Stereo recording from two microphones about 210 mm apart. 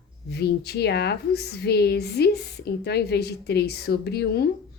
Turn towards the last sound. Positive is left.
turn(degrees=50)  # may be behind; listen again after turning